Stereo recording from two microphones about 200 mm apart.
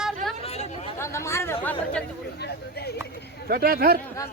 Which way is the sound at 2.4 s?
55° left (ahead or behind).